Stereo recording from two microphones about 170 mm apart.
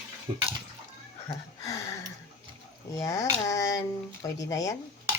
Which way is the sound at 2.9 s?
20° left (ahead or behind).